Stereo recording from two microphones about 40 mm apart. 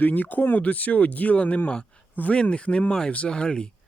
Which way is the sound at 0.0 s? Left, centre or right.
Left.